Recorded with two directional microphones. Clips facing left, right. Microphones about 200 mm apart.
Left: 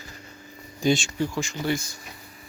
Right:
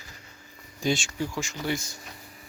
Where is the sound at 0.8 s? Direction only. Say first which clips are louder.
Left 5 dB; 5° right (ahead or behind).